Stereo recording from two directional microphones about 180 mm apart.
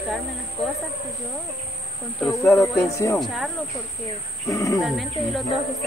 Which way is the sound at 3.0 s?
15° left (ahead or behind).